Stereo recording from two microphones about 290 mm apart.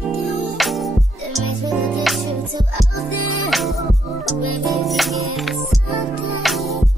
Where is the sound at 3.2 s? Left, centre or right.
Left.